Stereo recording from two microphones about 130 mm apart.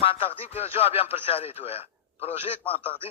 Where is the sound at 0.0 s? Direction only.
45° left (ahead or behind).